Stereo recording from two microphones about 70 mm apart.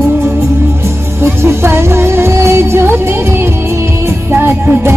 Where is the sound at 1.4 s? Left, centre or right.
Right.